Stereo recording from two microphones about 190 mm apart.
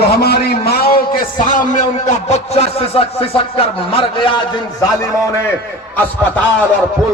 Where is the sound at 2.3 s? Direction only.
35° left (ahead or behind).